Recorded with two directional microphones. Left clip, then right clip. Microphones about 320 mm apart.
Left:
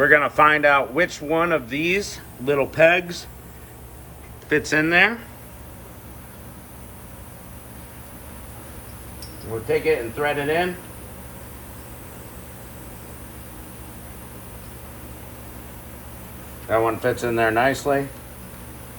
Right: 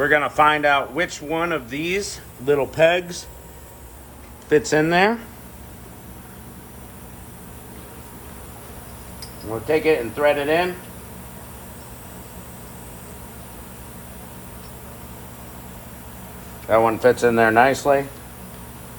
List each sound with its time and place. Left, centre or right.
0.0 s speech: centre
4.4 s speech: centre
9.6 s speech: right
16.6 s speech: right